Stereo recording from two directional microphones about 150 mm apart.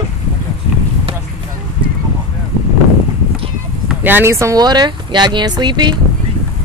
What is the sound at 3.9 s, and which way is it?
Speech, 15° right (ahead or behind).